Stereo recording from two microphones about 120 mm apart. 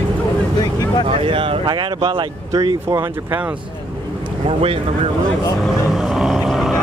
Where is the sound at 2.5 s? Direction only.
30° right (ahead or behind).